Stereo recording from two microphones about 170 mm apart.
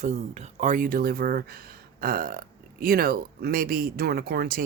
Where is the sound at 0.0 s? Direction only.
45° right (ahead or behind).